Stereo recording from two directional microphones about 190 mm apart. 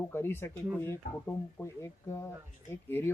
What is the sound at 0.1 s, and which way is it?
Speech, 10° left (ahead or behind).